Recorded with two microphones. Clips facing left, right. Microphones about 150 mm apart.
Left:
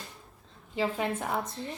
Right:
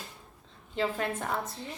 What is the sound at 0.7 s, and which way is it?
Speech, 15° left (ahead or behind).